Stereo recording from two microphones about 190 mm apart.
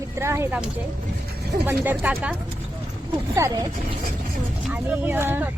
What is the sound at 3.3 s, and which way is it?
Speech, 20° right (ahead or behind).